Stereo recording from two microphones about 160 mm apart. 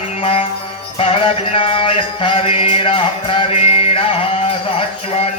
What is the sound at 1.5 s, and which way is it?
Music, 35° left (ahead or behind).